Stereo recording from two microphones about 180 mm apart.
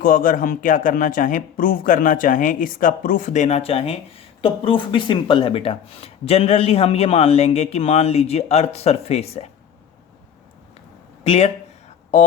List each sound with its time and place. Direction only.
0.0 s speech: 50° left (ahead or behind)
11.2 s speech: 35° left (ahead or behind)